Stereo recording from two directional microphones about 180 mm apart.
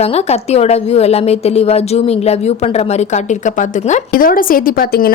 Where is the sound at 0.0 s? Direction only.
35° left (ahead or behind).